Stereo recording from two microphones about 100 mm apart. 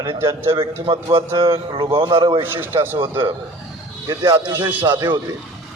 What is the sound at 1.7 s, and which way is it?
Speech, 65° right (ahead or behind).